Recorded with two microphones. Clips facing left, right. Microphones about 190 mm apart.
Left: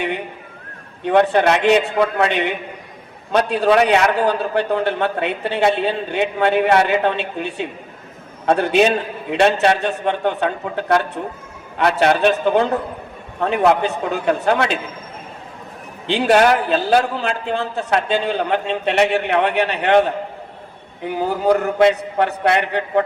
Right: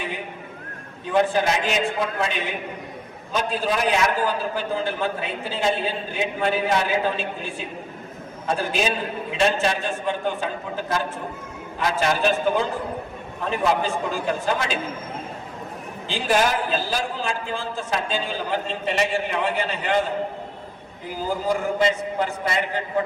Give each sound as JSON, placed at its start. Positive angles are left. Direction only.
{"t": 1.0, "sound": "a man's voice", "side_deg": 65}
{"t": 16.0, "sound": "a man's voice", "side_deg": 65}